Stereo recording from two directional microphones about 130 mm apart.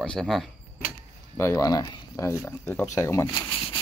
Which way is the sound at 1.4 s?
25° left (ahead or behind).